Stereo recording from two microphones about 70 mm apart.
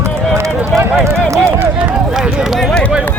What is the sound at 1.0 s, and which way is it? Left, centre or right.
Speech, right.